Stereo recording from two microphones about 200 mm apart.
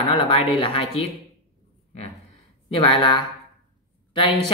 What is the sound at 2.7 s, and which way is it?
Speech, 25° left (ahead or behind).